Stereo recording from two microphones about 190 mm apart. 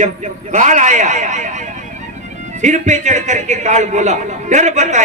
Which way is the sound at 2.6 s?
40° right (ahead or behind).